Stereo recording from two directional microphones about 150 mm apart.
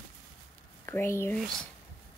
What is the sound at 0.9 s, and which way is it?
Speech, 15° left (ahead or behind).